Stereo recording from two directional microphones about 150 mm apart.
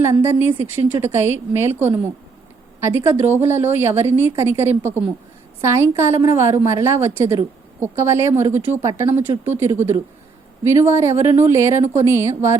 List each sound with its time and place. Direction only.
0.0 s a woman's voice: 15° right (ahead or behind)